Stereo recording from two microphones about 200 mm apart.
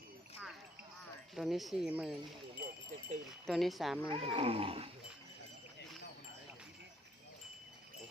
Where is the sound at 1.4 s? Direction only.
Centre (ahead or behind).